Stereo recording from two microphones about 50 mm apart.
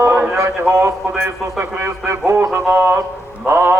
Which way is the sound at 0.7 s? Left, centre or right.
Right.